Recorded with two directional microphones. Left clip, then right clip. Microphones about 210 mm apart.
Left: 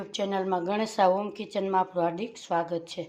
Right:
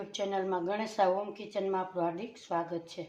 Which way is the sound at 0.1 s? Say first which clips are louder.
Left 5 dB; 40° left (ahead or behind).